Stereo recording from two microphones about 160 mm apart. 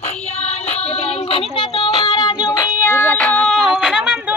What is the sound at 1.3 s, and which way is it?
Music, 30° left (ahead or behind).